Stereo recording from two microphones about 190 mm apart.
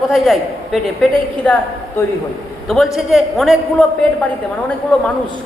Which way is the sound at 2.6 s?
Centre (ahead or behind).